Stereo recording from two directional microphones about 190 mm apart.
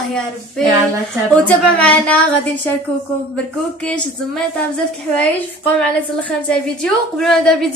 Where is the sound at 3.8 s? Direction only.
5° left (ahead or behind).